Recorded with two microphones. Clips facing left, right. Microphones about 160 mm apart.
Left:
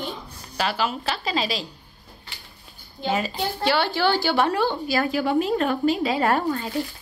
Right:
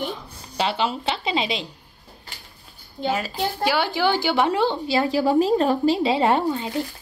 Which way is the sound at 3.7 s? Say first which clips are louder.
Even; 15° right (ahead or behind).